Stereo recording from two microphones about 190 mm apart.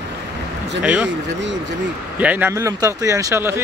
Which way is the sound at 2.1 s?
10° right (ahead or behind).